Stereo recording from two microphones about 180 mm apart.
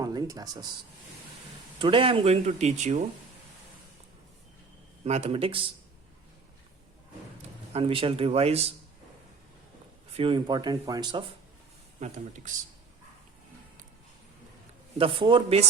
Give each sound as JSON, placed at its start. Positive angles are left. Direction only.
{"t": 0.0, "sound": "a sound", "side_deg": -20}
{"t": 1.8, "sound": "speech", "side_deg": -30}
{"t": 5.0, "sound": "speech", "side_deg": -35}
{"t": 7.7, "sound": "speech", "side_deg": -30}
{"t": 10.2, "sound": "speech", "side_deg": -25}
{"t": 11.9, "sound": "speech", "side_deg": -40}
{"t": 14.9, "sound": "speech", "side_deg": -30}